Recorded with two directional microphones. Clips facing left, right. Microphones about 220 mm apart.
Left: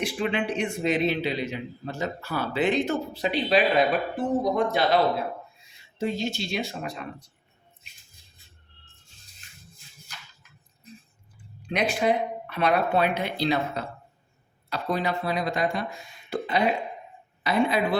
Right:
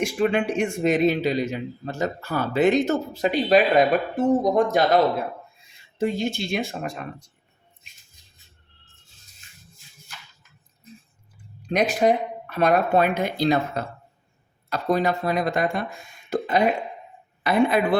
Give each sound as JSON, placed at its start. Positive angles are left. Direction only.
{"t": 0.0, "sound": "a man's voice", "side_deg": -45}
{"t": 6.0, "sound": "a man's voice", "side_deg": -55}
{"t": 11.6, "sound": "a man's voice", "side_deg": -40}